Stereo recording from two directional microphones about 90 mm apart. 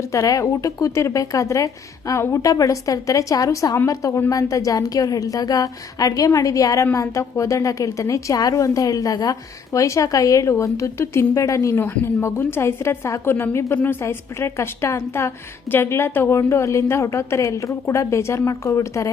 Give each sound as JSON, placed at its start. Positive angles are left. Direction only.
{"t": 0.1, "sound": "a woman's voice", "side_deg": 35}
{"t": 11.8, "sound": "a woman's voice", "side_deg": 25}